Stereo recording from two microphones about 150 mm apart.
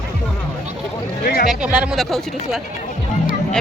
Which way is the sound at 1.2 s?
85° left.